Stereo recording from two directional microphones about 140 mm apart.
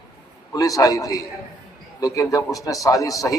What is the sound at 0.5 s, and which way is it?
A man's voice, 25° left (ahead or behind).